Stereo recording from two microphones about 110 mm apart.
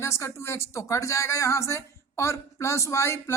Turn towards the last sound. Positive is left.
turn(degrees=25)  # may be behind; listen again after turning